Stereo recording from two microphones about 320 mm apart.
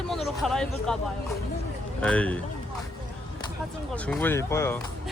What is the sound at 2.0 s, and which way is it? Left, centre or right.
Speech, centre.